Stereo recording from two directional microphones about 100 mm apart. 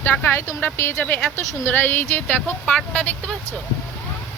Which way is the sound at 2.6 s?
10° left (ahead or behind).